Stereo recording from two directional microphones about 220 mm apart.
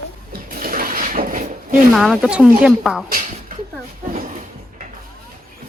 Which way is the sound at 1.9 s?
Centre (ahead or behind).